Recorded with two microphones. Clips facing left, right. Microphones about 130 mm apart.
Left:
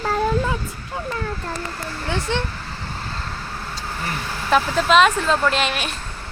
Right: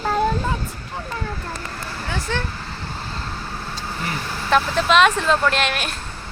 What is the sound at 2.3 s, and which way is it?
Speech, 20° left (ahead or behind).